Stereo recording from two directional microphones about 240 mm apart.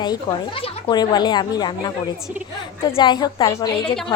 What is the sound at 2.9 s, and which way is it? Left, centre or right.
Speech, centre.